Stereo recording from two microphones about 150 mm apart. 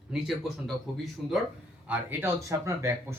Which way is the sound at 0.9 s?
Centre (ahead or behind).